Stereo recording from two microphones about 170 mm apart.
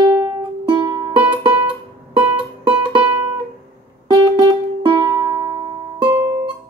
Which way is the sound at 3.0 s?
15° right (ahead or behind).